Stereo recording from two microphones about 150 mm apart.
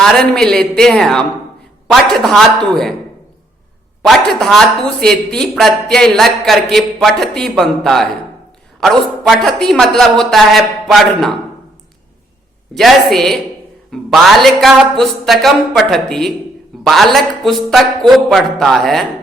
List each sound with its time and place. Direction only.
0.0 s speech: 5° left (ahead or behind)
4.0 s speech: 5° left (ahead or behind)
12.7 s speech: centre (ahead or behind)